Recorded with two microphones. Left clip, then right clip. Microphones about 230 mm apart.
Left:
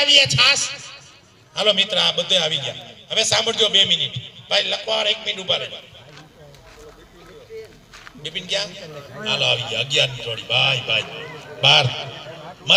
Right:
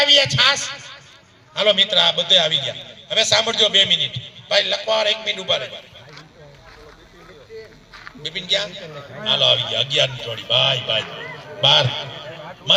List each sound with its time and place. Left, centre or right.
0.0 s a man's voice: left
8.3 s a man's voice: left
12.2 s a sound: right